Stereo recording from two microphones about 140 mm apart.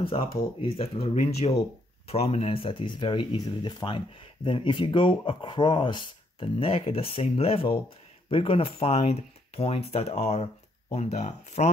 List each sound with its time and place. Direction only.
0.1 s speech: 40° left (ahead or behind)